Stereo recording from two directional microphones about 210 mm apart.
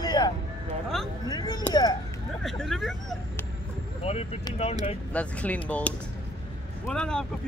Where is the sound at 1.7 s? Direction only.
20° left (ahead or behind).